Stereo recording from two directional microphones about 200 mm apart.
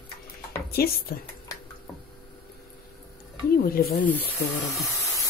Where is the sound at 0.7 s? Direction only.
50° left (ahead or behind).